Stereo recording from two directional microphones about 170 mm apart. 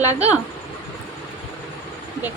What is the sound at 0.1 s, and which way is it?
Speech, 10° right (ahead or behind).